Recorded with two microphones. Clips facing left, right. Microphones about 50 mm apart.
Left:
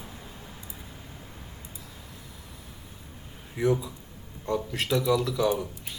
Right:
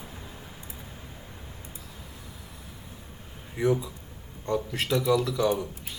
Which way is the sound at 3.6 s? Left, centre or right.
Centre.